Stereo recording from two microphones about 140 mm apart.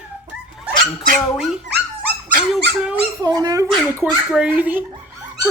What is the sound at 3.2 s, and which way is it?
Speech, 30° right (ahead or behind).